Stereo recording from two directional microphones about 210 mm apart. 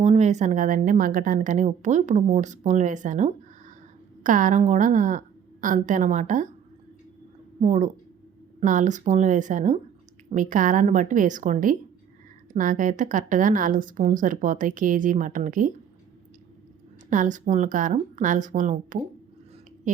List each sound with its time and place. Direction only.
0.0 s a woman's voice: 35° right (ahead or behind)
7.6 s a woman's voice: 35° right (ahead or behind)
17.1 s a woman's voice: 35° right (ahead or behind)